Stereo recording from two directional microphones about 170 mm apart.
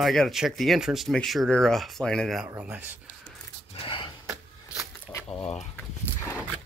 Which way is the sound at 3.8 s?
30° left (ahead or behind).